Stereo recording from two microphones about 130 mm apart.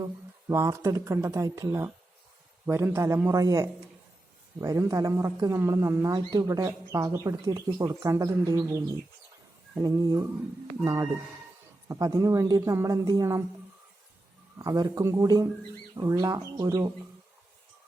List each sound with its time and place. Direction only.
0.0 s speech: 25° right (ahead or behind)
14.6 s speech: 30° right (ahead or behind)